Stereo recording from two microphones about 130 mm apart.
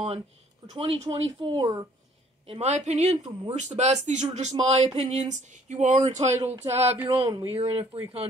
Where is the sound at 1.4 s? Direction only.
30° right (ahead or behind).